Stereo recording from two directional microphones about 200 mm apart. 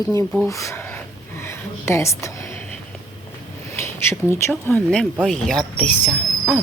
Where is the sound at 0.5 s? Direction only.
15° left (ahead or behind).